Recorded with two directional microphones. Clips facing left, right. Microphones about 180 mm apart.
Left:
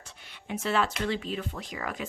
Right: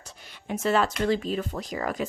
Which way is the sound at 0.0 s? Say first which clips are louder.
Right 4 dB; 40° right (ahead or behind).